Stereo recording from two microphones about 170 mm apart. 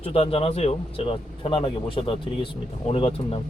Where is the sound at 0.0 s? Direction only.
35° left (ahead or behind).